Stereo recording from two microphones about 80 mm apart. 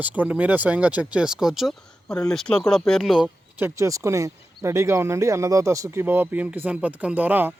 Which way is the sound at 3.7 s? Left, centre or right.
Right.